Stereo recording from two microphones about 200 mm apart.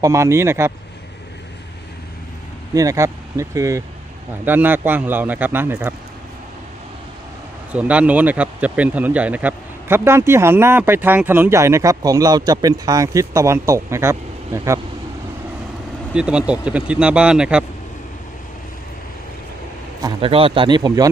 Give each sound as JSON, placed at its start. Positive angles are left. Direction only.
{"t": 0.0, "sound": "speech", "side_deg": -15}
{"t": 2.7, "sound": "speech", "side_deg": -15}
{"t": 7.7, "sound": "speech", "side_deg": -5}
{"t": 16.1, "sound": "speech", "side_deg": -5}
{"t": 20.2, "sound": "speech", "side_deg": -25}